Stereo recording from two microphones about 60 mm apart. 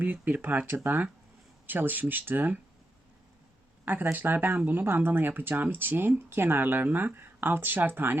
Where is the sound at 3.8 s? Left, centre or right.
Right.